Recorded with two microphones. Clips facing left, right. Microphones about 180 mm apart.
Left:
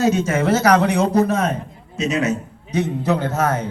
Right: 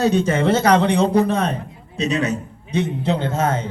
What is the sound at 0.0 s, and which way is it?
A man's voice, 35° right (ahead or behind).